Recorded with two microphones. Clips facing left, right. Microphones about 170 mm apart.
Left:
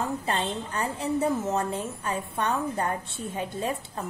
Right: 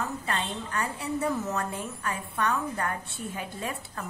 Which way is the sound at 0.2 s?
30° left (ahead or behind).